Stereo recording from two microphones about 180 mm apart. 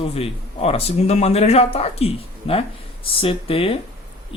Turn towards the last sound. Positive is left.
turn(degrees=30)  # may be behind; listen again after turning